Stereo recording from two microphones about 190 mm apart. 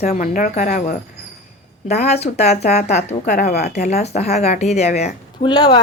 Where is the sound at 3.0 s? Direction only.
50° left (ahead or behind).